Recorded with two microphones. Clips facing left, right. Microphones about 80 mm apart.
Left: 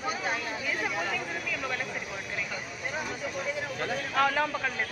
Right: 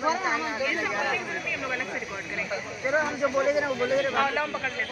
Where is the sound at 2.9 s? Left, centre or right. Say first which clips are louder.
Right 10 dB; right.